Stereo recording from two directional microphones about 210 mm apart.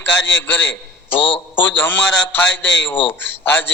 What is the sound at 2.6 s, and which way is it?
Speech, 60° left (ahead or behind).